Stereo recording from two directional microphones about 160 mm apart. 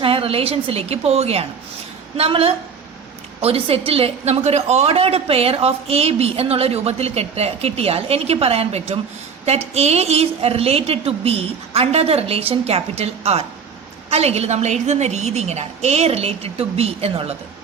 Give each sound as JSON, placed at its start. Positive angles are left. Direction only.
{"t": 0.0, "sound": "a woman's voice", "side_deg": -35}